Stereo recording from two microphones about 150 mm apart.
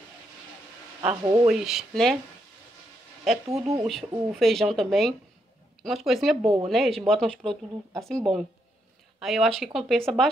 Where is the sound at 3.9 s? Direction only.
Centre (ahead or behind).